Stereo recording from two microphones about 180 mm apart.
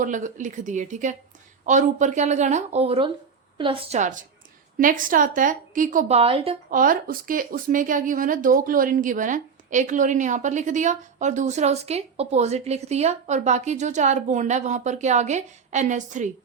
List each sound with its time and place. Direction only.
0.0 s speech: 45° right (ahead or behind)
6.1 s speech: 30° right (ahead or behind)
6.7 s speech: 50° right (ahead or behind)